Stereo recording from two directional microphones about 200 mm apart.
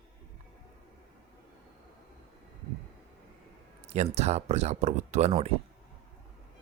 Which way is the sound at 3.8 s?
30° right (ahead or behind).